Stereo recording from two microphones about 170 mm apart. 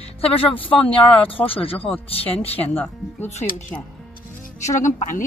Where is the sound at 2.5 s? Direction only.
10° left (ahead or behind).